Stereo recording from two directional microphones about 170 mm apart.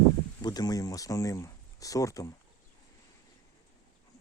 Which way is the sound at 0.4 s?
25° left (ahead or behind).